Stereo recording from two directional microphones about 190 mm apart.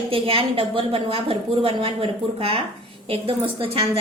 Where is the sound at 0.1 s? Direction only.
30° right (ahead or behind).